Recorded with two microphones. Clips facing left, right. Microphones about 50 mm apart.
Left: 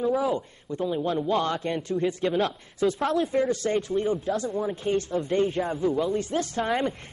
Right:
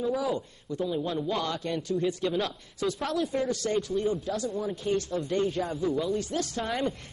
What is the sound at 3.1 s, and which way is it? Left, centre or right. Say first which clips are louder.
Speech: left 4 dB; left.